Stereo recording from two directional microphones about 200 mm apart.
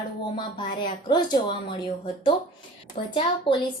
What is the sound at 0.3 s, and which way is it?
Speech, 25° left (ahead or behind).